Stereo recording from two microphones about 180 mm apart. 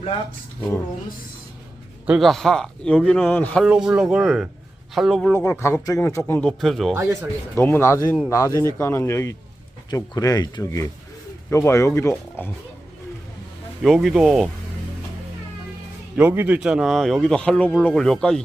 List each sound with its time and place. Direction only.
2.0 s speech: centre (ahead or behind)
3.6 s speech: 5° right (ahead or behind)
5.3 s speech: 10° left (ahead or behind)
6.6 s speech: centre (ahead or behind)
6.9 s speech: 15° right (ahead or behind)
7.5 s speech: 10° left (ahead or behind)
13.8 s speech: centre (ahead or behind)
16.1 s speech: 10° right (ahead or behind)